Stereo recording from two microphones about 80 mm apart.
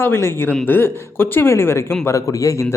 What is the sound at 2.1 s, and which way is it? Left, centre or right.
Speech, left.